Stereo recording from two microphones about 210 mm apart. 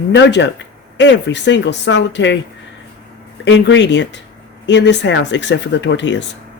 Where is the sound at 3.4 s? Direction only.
55° left (ahead or behind).